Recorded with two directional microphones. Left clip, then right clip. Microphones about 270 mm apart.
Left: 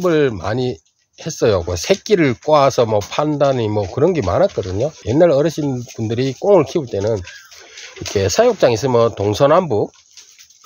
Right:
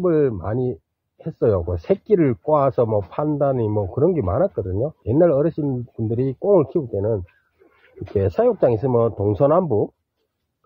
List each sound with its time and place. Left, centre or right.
0.0 s speech: centre
8.2 s speech: centre